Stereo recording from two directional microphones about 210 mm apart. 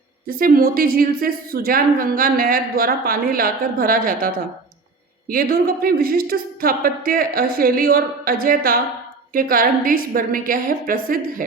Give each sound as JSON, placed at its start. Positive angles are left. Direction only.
{"t": 0.3, "sound": "a woman's voice", "side_deg": -45}